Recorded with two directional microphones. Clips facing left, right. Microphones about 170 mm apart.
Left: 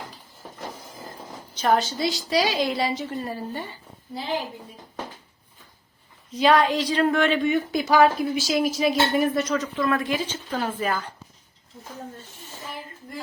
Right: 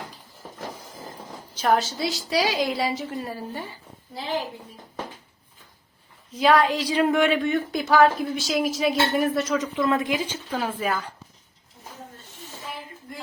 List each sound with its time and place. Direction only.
1.5 s a woman's voice: 5° right (ahead or behind)
6.3 s a woman's voice: 5° right (ahead or behind)
7.3 s speech: centre (ahead or behind)
9.6 s a woman's voice: 20° right (ahead or behind)